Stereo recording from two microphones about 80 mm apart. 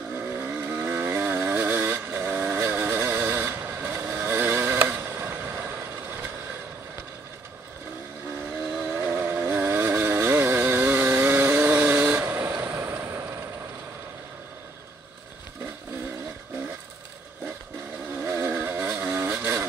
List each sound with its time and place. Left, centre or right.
0.1 s vehicle: right
8.7 s chainsaw: right
18.1 s vehicle: right